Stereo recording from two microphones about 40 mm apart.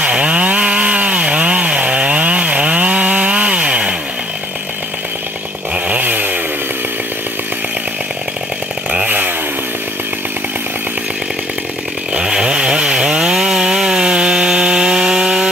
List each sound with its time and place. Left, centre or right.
0.0 s chainsaw: right
5.9 s chainsaw: right
12.2 s chainsaw: centre